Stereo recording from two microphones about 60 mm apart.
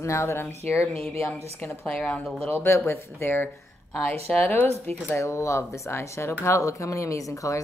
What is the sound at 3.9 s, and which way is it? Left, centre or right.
Speech, centre.